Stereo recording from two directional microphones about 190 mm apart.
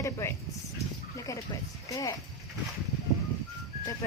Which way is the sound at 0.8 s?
15° left (ahead or behind).